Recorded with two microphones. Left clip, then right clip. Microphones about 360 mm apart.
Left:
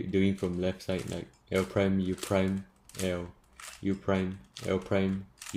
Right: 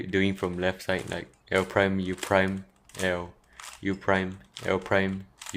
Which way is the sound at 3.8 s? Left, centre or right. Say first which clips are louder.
Right 5 dB; centre.